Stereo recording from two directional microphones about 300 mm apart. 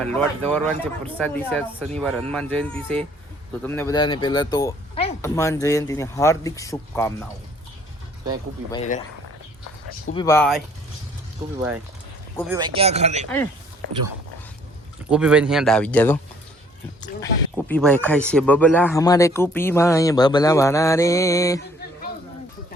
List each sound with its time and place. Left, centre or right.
0.0 s speech: centre
8.7 s speech: left
10.2 s speech: centre
12.5 s speech: centre
15.1 s speech: centre
17.5 s speech: centre